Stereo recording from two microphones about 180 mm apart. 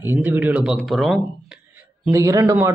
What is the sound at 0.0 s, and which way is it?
A man's voice, 10° right (ahead or behind).